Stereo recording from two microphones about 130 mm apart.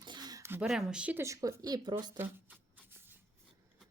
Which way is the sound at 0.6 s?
5° right (ahead or behind).